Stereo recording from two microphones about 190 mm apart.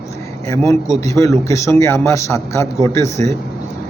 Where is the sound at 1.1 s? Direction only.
15° left (ahead or behind).